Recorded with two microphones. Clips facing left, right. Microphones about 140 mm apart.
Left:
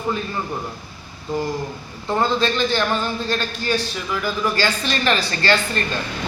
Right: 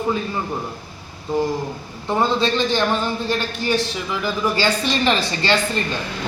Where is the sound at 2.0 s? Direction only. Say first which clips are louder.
Right 1 dB; 15° right (ahead or behind).